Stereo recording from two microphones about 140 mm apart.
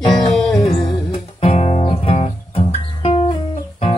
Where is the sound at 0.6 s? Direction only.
25° left (ahead or behind).